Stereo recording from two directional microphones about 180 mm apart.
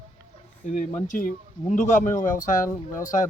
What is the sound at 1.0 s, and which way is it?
Speech, 50° left (ahead or behind).